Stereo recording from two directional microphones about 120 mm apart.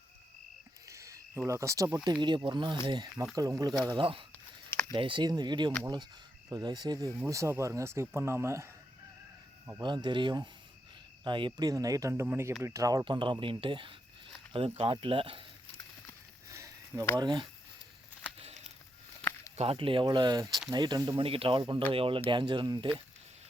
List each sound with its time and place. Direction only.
0.9 s cricket: 25° right (ahead or behind)
2.2 s speech: 40° right (ahead or behind)
3.8 s speech: 45° right (ahead or behind); by 8.7 s 20° right (ahead or behind)
9.8 s speech: 40° right (ahead or behind)
13.1 s speech: 40° right (ahead or behind)
14.5 s speech: 55° right (ahead or behind)
16.5 s a sound: 25° right (ahead or behind)
17.2 s speech: 40° right (ahead or behind)
18.3 s a sound: 60° right (ahead or behind)
19.5 s speech: 55° right (ahead or behind); by 21.2 s 35° right (ahead or behind)
21.2 s speech: 50° right (ahead or behind)